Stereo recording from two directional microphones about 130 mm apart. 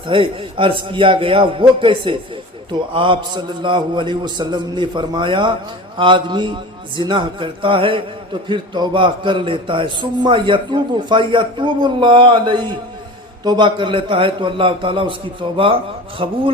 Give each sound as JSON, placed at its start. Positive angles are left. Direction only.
{"t": 0.1, "sound": "a man's voice", "side_deg": -40}